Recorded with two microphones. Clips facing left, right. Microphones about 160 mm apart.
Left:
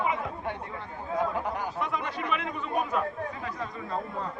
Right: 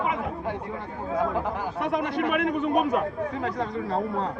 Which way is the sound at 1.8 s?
65° right (ahead or behind).